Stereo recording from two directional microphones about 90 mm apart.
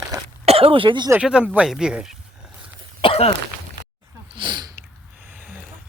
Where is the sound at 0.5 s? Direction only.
85° right.